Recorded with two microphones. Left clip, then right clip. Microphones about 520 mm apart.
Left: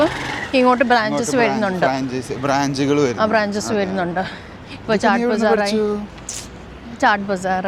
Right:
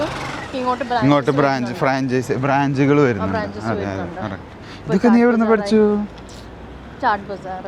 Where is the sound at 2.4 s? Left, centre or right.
Centre.